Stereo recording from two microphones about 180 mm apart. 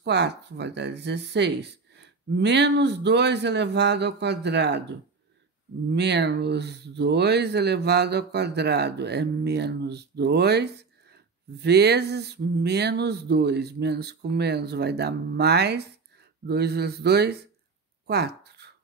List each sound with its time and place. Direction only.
0.0 s speech: 70° right (ahead or behind)
5.9 s speech: 70° right (ahead or behind)
18.0 s a sound: 65° right (ahead or behind)